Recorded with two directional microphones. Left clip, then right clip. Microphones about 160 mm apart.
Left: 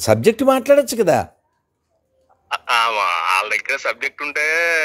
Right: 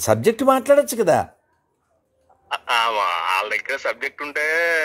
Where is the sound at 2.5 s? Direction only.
Centre (ahead or behind).